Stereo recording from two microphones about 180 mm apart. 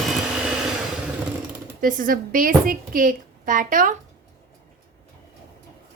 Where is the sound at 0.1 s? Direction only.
5° right (ahead or behind).